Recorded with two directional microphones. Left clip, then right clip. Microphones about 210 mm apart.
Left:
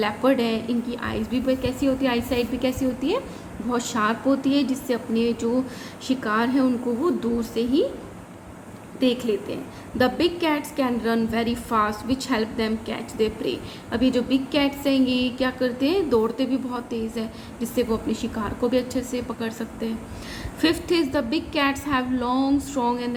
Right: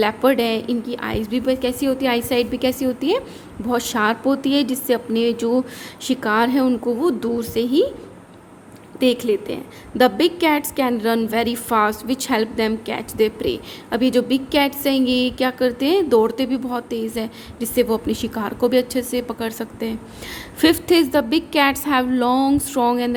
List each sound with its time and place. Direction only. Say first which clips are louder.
0.0 s a woman's voice: right 4 dB; 40° right (ahead or behind)
9.0 s a woman's voice: right 5 dB; 40° right (ahead or behind)